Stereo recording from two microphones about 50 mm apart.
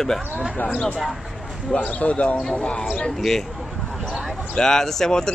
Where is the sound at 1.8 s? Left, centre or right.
Left.